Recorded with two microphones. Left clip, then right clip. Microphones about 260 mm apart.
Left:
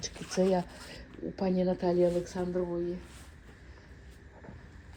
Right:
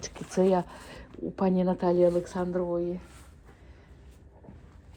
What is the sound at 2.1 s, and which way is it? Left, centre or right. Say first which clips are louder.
Speech: right 4 dB; centre.